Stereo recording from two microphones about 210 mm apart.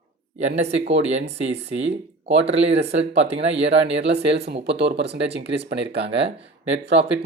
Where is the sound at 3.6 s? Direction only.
55° right (ahead or behind).